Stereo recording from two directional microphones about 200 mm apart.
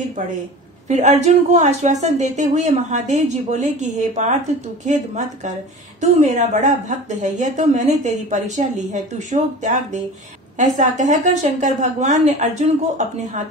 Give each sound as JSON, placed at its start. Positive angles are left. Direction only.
{"t": 0.8, "sound": "speech", "side_deg": -35}
{"t": 10.8, "sound": "speech", "side_deg": -35}